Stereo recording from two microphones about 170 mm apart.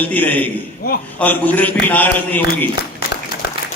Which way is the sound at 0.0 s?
10° left (ahead or behind).